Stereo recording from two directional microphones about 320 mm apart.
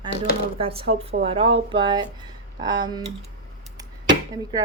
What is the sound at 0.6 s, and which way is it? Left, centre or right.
A woman's voice, centre.